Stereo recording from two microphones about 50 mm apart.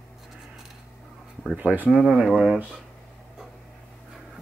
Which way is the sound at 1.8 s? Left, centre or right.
Centre.